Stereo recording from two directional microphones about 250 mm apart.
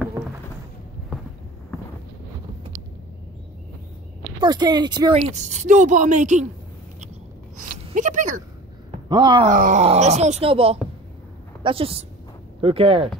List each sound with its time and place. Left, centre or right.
4.4 s speech: centre
5.3 s speech: right
7.5 s a sound: right
9.1 s speech: centre
9.5 s speech: right